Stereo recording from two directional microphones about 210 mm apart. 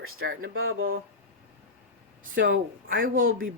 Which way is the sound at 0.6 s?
75° right (ahead or behind).